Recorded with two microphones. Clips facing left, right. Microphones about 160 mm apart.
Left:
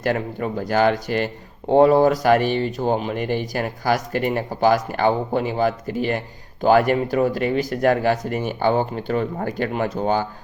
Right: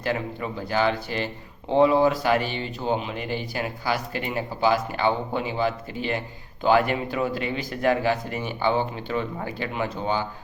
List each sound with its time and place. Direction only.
0.0 s speech: 45° left (ahead or behind)